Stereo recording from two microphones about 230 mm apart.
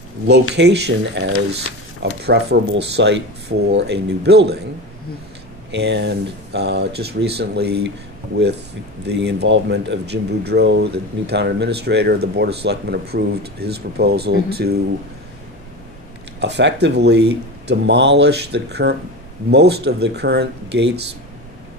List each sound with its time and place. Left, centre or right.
0.6 s speech: right
5.7 s speech: right
9.0 s speech: right
16.3 s speech: right